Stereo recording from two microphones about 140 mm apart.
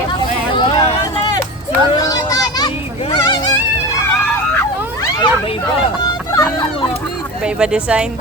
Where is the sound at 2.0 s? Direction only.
25° left (ahead or behind).